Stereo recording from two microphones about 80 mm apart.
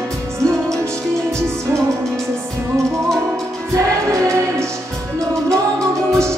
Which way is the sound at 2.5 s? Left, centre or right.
Right.